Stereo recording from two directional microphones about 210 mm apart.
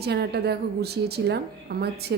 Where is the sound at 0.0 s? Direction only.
50° right (ahead or behind).